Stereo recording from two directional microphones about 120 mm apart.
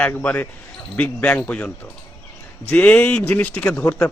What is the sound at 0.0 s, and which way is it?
A man's voice, 15° left (ahead or behind).